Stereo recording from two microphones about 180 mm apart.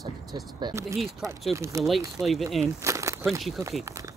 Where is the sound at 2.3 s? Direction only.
Centre (ahead or behind).